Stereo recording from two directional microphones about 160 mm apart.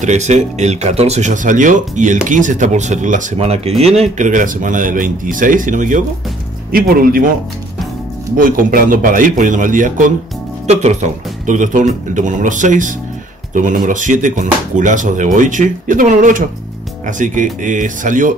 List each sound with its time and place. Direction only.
0.0 s speech: 45° right (ahead or behind)
6.7 s speech: 65° right (ahead or behind)
8.4 s speech: 60° right (ahead or behind)